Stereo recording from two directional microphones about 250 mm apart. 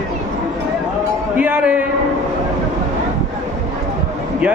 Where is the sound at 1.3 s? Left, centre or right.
Centre.